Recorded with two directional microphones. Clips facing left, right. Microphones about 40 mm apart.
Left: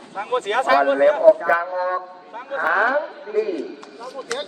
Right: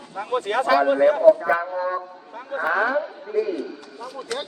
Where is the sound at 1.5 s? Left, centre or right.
Left.